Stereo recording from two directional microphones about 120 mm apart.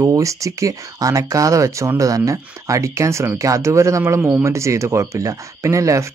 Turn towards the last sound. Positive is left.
turn(degrees=-25)  # may be behind; listen again after turning